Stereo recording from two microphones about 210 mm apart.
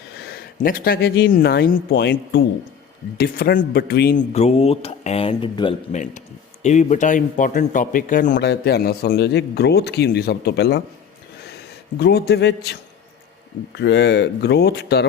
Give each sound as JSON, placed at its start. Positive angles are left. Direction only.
{"t": 0.2, "sound": "speech", "side_deg": 45}
{"t": 6.0, "sound": "a man's voice", "side_deg": 35}
{"t": 11.9, "sound": "a man's voice", "side_deg": 50}
{"t": 13.7, "sound": "a man's voice", "side_deg": 55}